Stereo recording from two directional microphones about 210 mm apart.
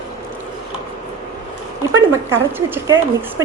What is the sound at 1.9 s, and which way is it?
Speech, 10° right (ahead or behind).